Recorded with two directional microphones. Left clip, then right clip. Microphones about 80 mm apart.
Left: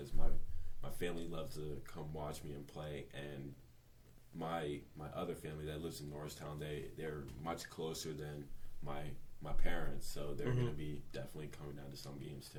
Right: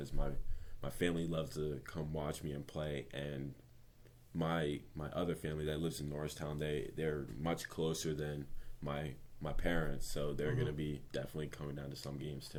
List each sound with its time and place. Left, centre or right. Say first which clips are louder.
0.8 s speech: right 6 dB; right
4.4 s speech: right 4 dB; right